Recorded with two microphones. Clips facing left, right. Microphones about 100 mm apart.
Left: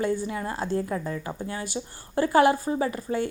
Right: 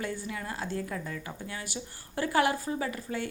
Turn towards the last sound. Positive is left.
turn(degrees=30)  # may be behind; listen again after turning